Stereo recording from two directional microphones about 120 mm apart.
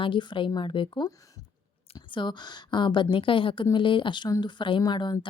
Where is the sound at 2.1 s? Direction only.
40° left (ahead or behind).